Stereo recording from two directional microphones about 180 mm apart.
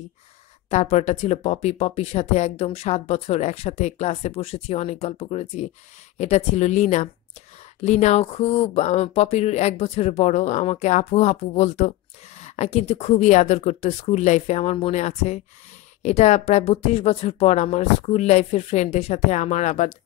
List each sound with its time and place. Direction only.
0.7 s speech: 40° left (ahead or behind)